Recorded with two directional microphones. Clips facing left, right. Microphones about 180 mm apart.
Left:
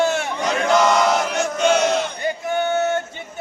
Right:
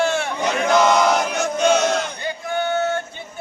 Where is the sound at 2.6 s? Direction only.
20° left (ahead or behind).